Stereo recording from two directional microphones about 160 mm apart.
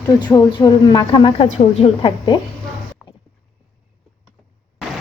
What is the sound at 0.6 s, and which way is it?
A woman's voice, 20° left (ahead or behind).